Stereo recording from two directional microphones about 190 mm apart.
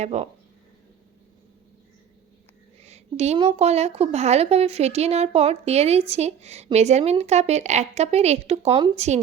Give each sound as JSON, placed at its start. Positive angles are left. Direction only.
{"t": 0.0, "sound": "a woman's voice", "side_deg": -35}
{"t": 2.8, "sound": "a woman's voice", "side_deg": -35}